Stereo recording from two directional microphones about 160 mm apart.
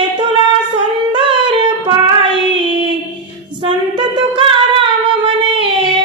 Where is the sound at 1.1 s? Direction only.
30° right (ahead or behind).